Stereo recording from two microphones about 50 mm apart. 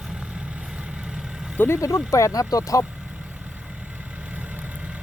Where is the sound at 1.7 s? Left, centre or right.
Left.